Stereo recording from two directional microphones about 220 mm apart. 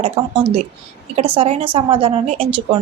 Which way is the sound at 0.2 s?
25° right (ahead or behind).